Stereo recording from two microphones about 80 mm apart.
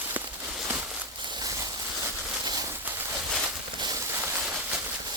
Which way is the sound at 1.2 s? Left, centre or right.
Right.